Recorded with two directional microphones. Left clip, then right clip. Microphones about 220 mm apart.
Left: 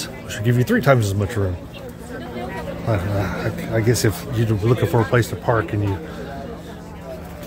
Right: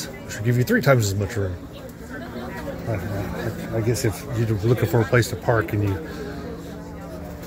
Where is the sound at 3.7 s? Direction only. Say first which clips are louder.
Left 5 dB; 25° left (ahead or behind).